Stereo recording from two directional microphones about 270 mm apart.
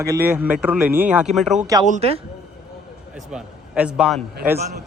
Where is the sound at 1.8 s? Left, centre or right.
Right.